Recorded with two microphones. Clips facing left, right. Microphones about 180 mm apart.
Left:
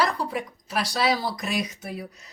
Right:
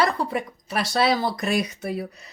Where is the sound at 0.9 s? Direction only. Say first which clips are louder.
Right 4 dB; 55° right (ahead or behind).